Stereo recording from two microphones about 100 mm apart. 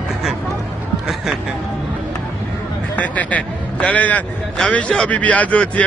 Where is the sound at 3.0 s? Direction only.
15° left (ahead or behind).